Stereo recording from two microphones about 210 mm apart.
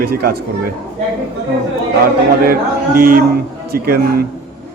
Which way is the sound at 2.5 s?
45° right (ahead or behind).